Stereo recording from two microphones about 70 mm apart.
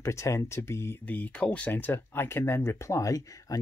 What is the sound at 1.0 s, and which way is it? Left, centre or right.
Speech, left.